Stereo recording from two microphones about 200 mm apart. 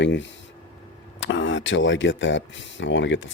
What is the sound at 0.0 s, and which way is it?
Speech, 65° left (ahead or behind).